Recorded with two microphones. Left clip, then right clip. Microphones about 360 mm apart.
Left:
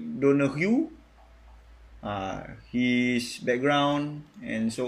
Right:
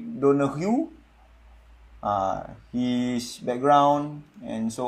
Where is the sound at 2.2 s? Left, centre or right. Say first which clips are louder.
Right 7 dB; right.